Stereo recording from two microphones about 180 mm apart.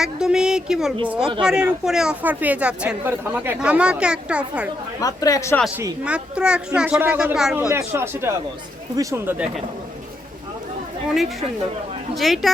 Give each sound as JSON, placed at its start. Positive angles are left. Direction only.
{"t": 0.0, "sound": "a sound", "side_deg": -5}
{"t": 1.0, "sound": "a woman's voice", "side_deg": -10}
{"t": 4.9, "sound": "speech", "side_deg": 20}
{"t": 5.7, "sound": "a woman's voice", "side_deg": -10}
{"t": 7.7, "sound": "a woman's voice", "side_deg": -15}
{"t": 11.1, "sound": "speech", "side_deg": 0}